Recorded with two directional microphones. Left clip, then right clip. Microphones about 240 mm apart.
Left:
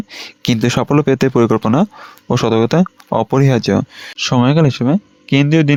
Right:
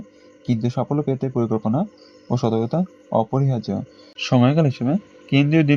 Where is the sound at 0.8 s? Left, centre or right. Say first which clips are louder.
Left 10 dB; left.